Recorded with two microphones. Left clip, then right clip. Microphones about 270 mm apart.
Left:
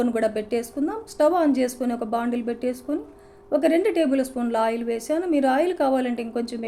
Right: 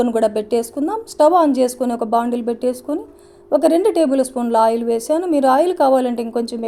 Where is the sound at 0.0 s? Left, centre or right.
Centre.